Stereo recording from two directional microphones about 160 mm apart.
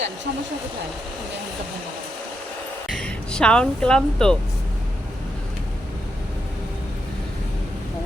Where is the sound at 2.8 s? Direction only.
5° left (ahead or behind).